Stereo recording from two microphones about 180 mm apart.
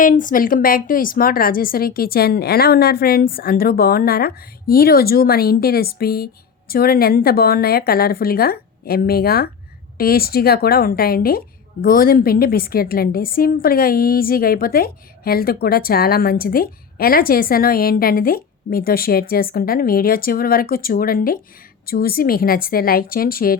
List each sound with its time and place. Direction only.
0.0 s a woman's voice: 45° left (ahead or behind)